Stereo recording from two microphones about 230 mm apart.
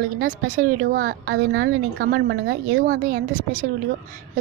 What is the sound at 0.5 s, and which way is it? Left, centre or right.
Speech, right.